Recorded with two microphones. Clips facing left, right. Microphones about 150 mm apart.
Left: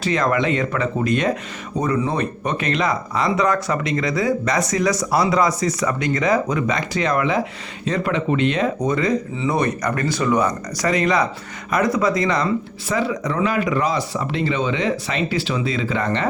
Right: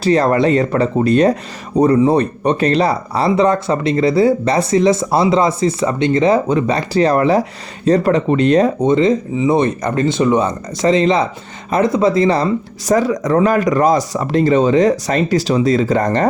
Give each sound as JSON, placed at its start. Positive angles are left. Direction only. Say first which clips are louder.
{"t": 0.0, "sound": "speech", "louder": "right 7 dB", "side_deg": -35}